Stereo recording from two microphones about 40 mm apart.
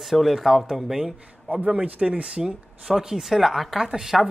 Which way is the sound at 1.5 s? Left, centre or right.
Right.